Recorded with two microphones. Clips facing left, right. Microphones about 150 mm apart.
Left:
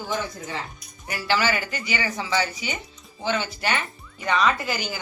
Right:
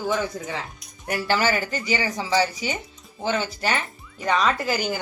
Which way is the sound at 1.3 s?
45° right (ahead or behind).